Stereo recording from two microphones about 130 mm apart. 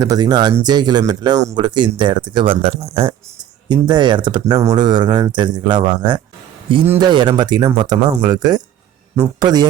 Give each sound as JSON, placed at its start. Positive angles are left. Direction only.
{"t": 0.0, "sound": "speech", "side_deg": -30}
{"t": 3.7, "sound": "speech", "side_deg": -35}